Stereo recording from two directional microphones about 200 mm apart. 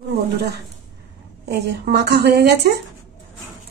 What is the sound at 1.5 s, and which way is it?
Speech, 55° right (ahead or behind).